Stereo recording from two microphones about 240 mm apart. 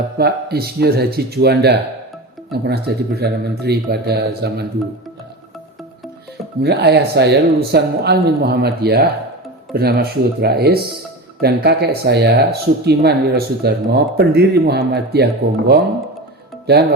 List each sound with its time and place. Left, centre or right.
0.2 s speech: right
6.6 s speech: right